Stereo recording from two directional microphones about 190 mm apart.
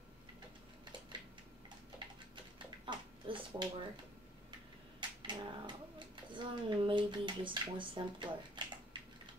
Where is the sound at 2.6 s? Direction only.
25° right (ahead or behind).